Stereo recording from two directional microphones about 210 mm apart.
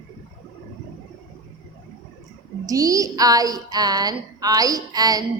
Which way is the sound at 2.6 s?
15° right (ahead or behind).